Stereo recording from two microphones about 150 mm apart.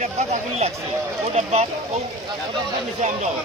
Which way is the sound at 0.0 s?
45° right (ahead or behind).